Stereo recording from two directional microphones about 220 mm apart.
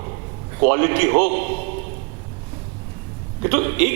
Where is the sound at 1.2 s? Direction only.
40° right (ahead or behind).